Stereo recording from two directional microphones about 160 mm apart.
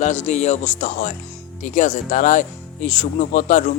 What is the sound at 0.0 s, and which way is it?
Speech, 45° left (ahead or behind).